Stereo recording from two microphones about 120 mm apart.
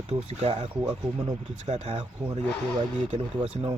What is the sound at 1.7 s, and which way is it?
Speech, 65° right (ahead or behind).